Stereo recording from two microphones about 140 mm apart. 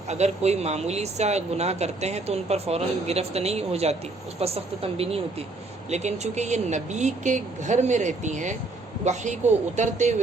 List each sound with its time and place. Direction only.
0.1 s speech: 50° right (ahead or behind)